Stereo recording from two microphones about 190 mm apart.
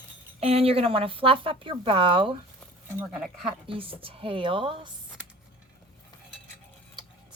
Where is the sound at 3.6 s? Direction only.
30° right (ahead or behind).